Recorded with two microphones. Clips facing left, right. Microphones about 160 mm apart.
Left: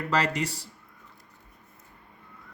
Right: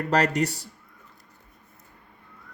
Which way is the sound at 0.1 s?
60° right (ahead or behind).